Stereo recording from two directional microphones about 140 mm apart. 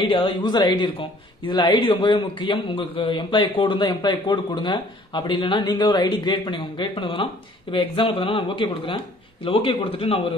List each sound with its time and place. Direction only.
0.1 s a man's voice: 35° left (ahead or behind)